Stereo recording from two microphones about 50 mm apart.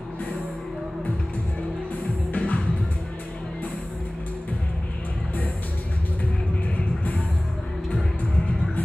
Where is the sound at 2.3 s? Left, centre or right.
Left.